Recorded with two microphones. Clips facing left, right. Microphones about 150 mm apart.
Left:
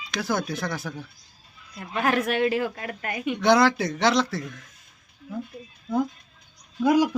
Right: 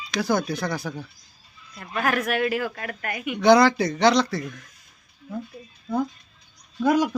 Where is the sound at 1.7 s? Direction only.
25° left (ahead or behind).